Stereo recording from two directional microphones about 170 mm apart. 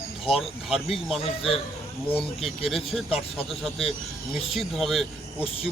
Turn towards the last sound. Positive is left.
turn(degrees=0)  # may be behind; listen again after turning